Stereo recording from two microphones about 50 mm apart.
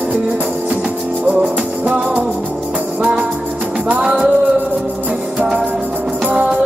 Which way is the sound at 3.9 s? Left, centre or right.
Right.